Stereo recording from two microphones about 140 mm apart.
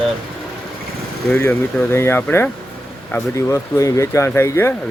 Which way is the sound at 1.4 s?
20° left (ahead or behind).